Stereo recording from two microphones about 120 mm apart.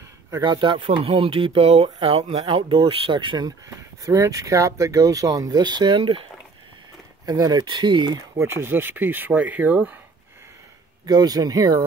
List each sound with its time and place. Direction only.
0.3 s speech: 40° right (ahead or behind)
7.2 s speech: 30° right (ahead or behind)
8.4 s speech: 20° right (ahead or behind)
11.1 s speech: 35° right (ahead or behind)